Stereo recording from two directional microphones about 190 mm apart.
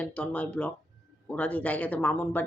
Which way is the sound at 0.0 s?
5° left (ahead or behind).